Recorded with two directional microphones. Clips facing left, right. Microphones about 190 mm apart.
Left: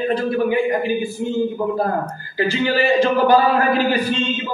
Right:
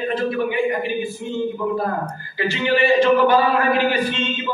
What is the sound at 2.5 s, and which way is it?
Speech, 35° left (ahead or behind).